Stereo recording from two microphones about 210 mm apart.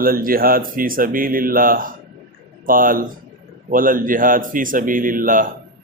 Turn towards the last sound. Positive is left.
turn(degrees=-40)  # may be behind; listen again after turning